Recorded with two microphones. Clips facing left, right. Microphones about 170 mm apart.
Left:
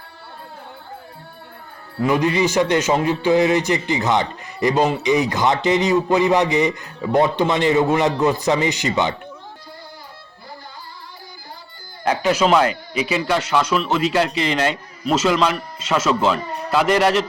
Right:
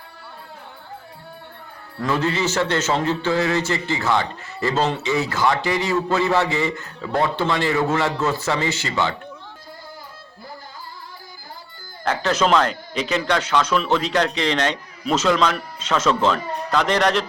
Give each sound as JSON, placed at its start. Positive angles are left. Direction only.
{"t": 2.0, "sound": "a man's voice", "side_deg": 15}
{"t": 12.0, "sound": "a man's voice", "side_deg": 10}